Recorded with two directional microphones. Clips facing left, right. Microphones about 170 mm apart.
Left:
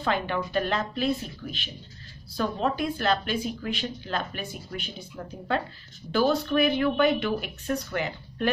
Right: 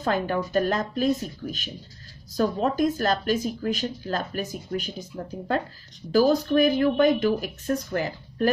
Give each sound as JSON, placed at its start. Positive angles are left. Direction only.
{"t": 0.0, "sound": "speech", "side_deg": -40}